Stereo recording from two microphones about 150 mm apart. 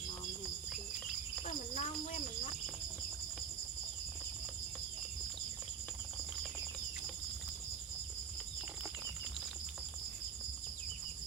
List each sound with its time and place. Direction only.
1.5 s cricket: 45° left (ahead or behind)